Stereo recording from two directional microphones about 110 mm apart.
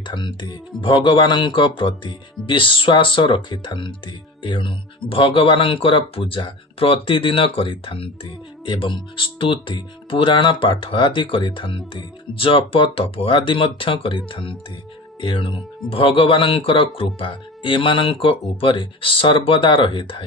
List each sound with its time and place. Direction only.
0.0 s speech: 45° left (ahead or behind)